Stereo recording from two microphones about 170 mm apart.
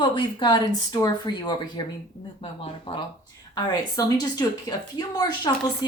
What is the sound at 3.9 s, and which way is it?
Speech, 20° left (ahead or behind).